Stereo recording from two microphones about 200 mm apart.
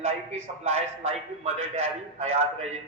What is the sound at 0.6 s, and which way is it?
A man's voice, 35° right (ahead or behind).